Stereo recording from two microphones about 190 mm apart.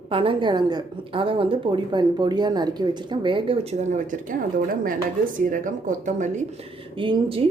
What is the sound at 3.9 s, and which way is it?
Speech, 45° right (ahead or behind).